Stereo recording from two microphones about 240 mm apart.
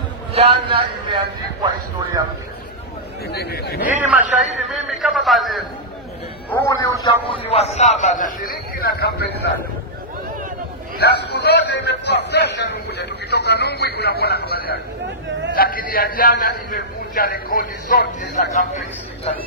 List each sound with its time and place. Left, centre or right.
0.3 s a man's voice: right
3.3 s a man's voice: left
4.2 s a man's voice: right
4.8 s a man's voice: centre
6.5 s a man's voice: centre; by 9.4 s left
11.0 s a man's voice: left